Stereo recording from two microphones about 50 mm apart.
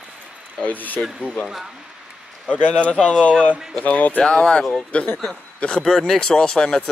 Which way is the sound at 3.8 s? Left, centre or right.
Left.